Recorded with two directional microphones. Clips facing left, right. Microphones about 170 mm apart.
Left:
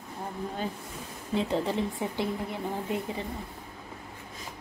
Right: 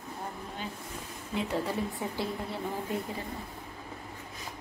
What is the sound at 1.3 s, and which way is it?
A woman's voice, 25° left (ahead or behind).